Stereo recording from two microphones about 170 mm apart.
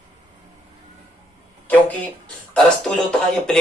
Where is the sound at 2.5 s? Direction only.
5° left (ahead or behind).